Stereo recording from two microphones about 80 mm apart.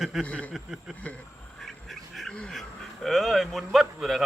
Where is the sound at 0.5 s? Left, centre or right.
Centre.